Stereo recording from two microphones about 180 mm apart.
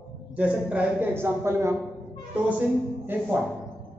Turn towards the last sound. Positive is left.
turn(degrees=-10)  # may be behind; listen again after turning